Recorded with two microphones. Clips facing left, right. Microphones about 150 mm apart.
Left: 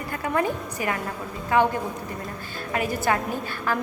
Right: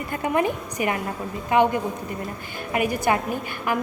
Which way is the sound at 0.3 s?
20° right (ahead or behind).